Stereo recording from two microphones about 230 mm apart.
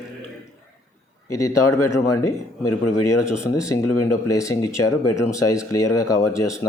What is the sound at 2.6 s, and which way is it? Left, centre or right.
Speech, left.